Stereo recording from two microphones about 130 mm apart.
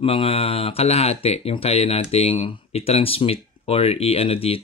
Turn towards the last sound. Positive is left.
turn(degrees=50)  # may be behind; listen again after turning